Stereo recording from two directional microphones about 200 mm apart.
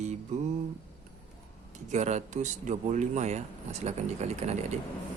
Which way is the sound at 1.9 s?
35° right (ahead or behind).